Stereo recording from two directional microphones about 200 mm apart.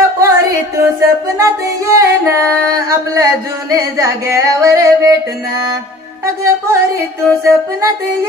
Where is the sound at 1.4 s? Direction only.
15° right (ahead or behind).